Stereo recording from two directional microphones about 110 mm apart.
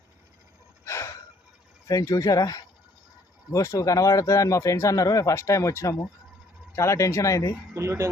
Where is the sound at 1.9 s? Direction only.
35° left (ahead or behind).